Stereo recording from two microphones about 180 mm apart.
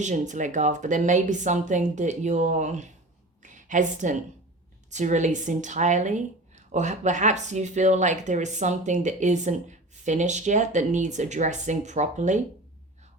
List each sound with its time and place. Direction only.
0.0 s speech: 40° right (ahead or behind)
3.4 s a sound: 45° right (ahead or behind)
4.9 s a woman's voice: 40° right (ahead or behind)